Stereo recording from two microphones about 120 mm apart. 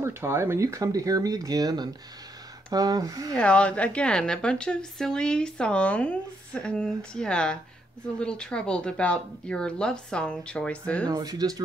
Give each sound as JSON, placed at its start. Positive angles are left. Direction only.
{"t": 0.0, "sound": "speech", "side_deg": -20}
{"t": 3.3, "sound": "a woman's voice", "side_deg": 10}
{"t": 11.1, "sound": "speech", "side_deg": -30}